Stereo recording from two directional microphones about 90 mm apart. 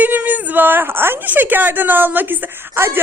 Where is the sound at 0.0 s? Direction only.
20° right (ahead or behind).